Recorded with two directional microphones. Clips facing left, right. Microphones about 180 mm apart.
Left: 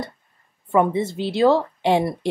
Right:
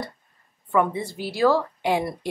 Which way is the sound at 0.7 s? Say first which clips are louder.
Left 4 dB; 25° left (ahead or behind).